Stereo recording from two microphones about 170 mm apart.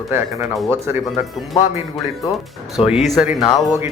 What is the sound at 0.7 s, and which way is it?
Speech, 15° right (ahead or behind).